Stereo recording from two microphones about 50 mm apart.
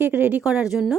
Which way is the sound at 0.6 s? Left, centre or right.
Centre.